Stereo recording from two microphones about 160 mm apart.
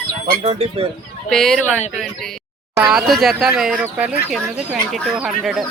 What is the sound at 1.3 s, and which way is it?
Speech, centre (ahead or behind).